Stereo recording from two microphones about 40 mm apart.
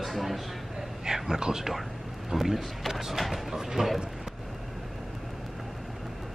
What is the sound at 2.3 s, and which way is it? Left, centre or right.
Speech, centre.